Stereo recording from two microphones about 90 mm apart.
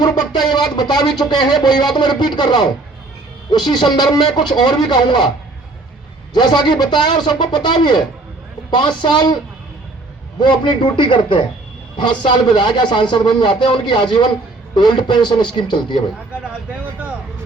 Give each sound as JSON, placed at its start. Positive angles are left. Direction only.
{"t": 0.0, "sound": "speech", "side_deg": 50}
{"t": 6.3, "sound": "speech", "side_deg": 55}
{"t": 10.4, "sound": "speech", "side_deg": 65}